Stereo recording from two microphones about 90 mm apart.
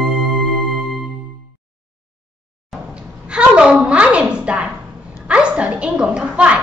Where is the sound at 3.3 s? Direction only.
10° right (ahead or behind).